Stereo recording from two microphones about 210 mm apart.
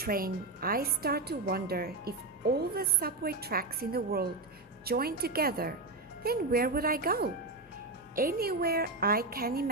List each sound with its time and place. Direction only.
0.0 s speech: 45° right (ahead or behind)